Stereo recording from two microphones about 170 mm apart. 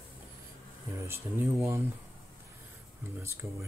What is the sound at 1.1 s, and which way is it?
Speech, 15° right (ahead or behind).